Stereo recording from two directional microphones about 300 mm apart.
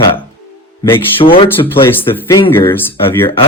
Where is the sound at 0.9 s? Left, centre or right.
Centre.